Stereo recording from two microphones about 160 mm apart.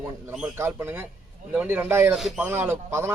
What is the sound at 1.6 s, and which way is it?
Speech, 10° right (ahead or behind).